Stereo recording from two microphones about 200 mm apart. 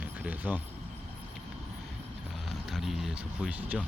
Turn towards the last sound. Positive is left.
turn(degrees=-5)  # may be behind; listen again after turning